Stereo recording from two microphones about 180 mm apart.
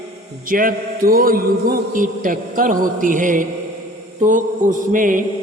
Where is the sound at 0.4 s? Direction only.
50° right (ahead or behind).